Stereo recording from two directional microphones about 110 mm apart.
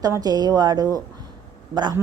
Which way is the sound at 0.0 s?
35° right (ahead or behind).